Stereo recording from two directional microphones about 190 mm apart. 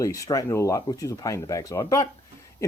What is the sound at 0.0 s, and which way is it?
Speech, 15° left (ahead or behind).